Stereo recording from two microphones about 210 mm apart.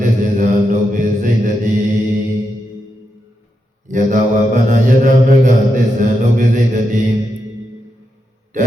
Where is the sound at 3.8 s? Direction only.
40° right (ahead or behind).